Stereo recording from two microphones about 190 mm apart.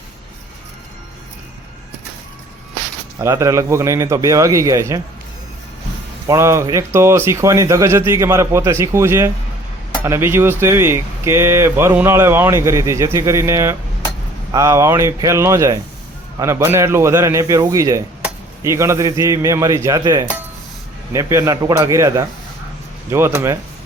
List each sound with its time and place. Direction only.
3.2 s speech: 15° right (ahead or behind)
6.2 s speech: 15° right (ahead or behind)